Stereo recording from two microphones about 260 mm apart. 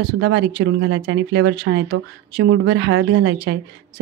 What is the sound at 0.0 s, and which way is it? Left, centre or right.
A woman's voice, right.